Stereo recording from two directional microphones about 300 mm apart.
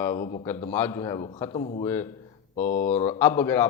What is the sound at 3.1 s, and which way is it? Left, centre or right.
Speech, centre.